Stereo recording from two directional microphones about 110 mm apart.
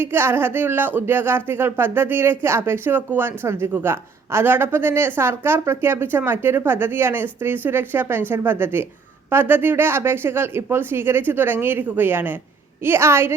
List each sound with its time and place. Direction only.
0.0 s speech: 20° right (ahead or behind)